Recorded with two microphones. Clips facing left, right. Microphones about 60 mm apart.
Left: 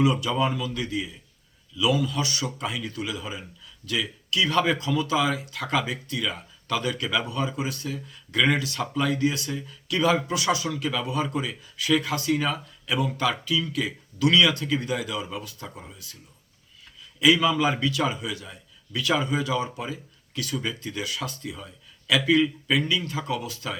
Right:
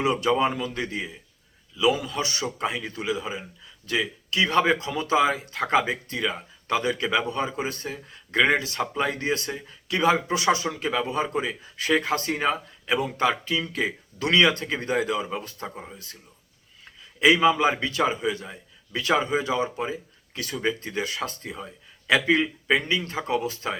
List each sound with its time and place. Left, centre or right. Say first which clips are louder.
0.0 s speech: right 1 dB; right
17.2 s speech: right 2 dB; right